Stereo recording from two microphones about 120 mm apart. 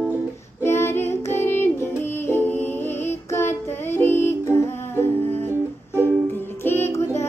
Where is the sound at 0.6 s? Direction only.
20° left (ahead or behind).